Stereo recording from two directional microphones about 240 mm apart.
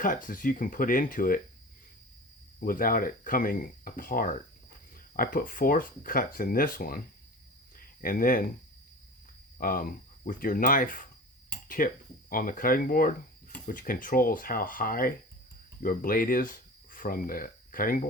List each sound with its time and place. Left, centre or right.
0.0 s speech: left
2.6 s speech: left
9.6 s speech: left